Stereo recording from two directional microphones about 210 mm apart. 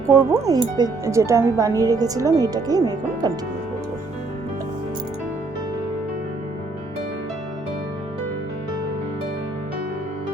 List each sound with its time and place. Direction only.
0.1 s speech: 15° right (ahead or behind)